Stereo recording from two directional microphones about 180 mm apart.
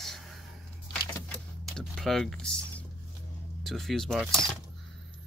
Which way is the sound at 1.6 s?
Centre (ahead or behind).